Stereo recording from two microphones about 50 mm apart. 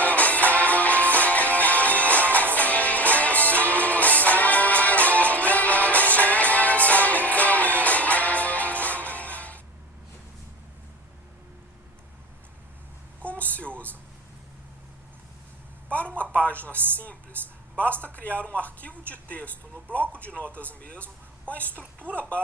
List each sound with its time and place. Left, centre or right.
0.0 s music: left
2.0 s music: right
2.6 s music: left
13.2 s a sound: left
16.1 s a sound: left
22.1 s clip-clop: left